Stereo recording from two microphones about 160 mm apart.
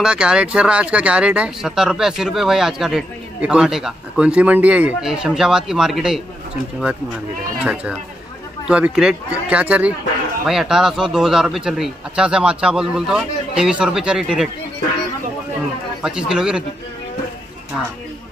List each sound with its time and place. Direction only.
0.0 s speech: 5° right (ahead or behind)
7.6 s speech: 5° right (ahead or behind)
16.0 s speech: 5° right (ahead or behind)